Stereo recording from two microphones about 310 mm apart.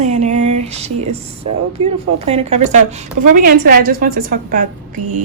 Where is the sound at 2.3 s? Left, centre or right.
Centre.